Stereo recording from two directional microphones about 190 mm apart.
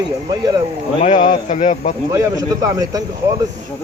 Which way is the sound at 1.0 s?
40° left (ahead or behind).